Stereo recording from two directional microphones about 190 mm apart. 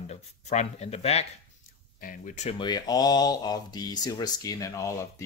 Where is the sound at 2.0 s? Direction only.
45° left (ahead or behind).